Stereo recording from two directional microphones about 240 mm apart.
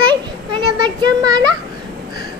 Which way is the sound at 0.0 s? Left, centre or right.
Centre.